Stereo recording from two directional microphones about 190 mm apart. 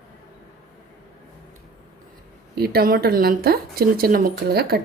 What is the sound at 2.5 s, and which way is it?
Speech, 55° right (ahead or behind).